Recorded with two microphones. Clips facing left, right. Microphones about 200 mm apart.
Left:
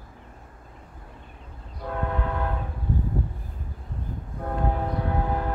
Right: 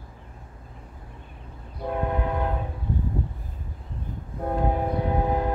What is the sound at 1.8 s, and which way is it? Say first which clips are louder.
Train: right 3 dB; 20° right (ahead or behind).